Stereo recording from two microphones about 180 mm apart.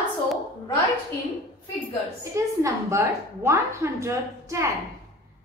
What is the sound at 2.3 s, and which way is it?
A woman's voice, 15° right (ahead or behind).